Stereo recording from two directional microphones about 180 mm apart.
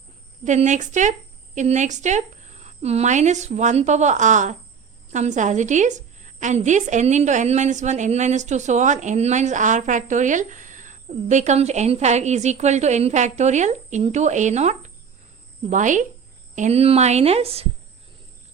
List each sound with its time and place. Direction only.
0.4 s a woman's voice: 40° right (ahead or behind)